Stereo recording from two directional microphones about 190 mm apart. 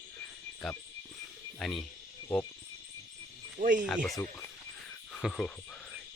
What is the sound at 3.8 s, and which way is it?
Speech, 5° left (ahead or behind).